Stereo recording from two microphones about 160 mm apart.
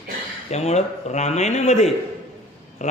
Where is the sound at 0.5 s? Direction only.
45° left (ahead or behind).